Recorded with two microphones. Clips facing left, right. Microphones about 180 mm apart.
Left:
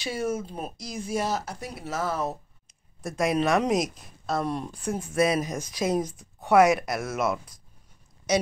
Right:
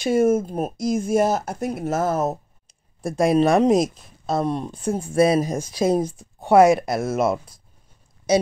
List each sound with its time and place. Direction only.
0.0 s speech: 50° right (ahead or behind)
3.0 s a woman's voice: 30° right (ahead or behind)